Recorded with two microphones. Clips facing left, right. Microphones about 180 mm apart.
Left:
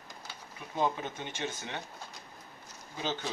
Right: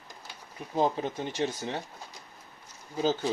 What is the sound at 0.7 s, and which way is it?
Speech, 35° right (ahead or behind).